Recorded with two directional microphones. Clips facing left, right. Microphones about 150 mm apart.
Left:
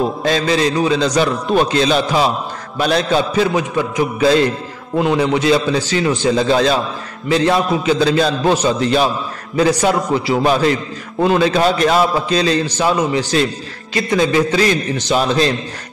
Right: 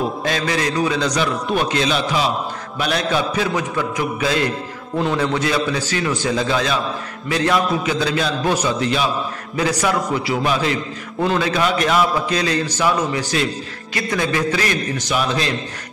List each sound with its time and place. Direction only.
0.2 s a man's voice: 25° left (ahead or behind)
4.9 s a man's voice: 15° left (ahead or behind)
10.5 s a man's voice: 40° left (ahead or behind)